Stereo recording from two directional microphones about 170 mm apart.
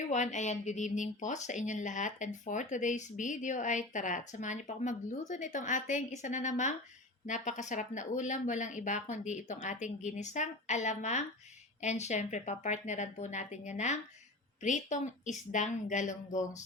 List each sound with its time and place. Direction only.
0.1 s speech: 45° left (ahead or behind)